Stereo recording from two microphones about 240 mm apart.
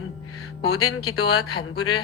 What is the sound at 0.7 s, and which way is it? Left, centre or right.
A woman's voice, left.